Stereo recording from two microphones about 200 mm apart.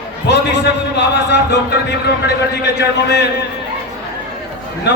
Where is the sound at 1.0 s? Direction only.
55° left (ahead or behind).